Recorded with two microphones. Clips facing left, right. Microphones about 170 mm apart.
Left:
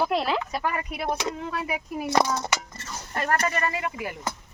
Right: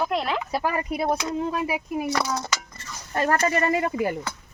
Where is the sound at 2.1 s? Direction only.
20° left (ahead or behind).